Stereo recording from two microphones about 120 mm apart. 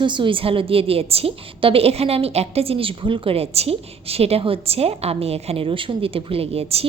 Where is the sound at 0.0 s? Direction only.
40° right (ahead or behind).